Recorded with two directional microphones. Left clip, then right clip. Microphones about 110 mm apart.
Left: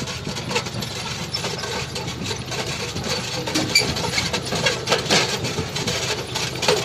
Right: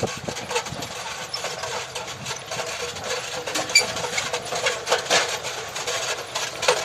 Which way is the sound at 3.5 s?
30° right (ahead or behind).